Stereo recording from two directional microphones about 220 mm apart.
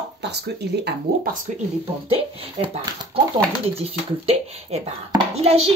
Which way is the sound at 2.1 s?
25° right (ahead or behind).